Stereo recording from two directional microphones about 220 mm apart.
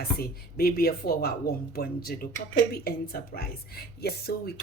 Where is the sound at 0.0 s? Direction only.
45° left (ahead or behind).